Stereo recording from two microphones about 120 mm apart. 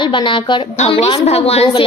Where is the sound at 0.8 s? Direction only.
60° left (ahead or behind).